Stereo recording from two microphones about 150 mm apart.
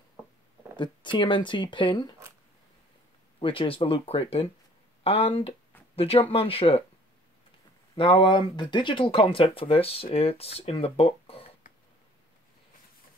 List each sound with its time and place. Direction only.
1.1 s speech: 35° left (ahead or behind)
3.3 s speech: 35° left (ahead or behind)
7.9 s speech: 35° left (ahead or behind)